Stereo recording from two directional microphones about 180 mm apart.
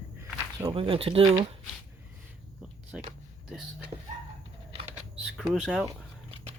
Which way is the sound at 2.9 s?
5° right (ahead or behind).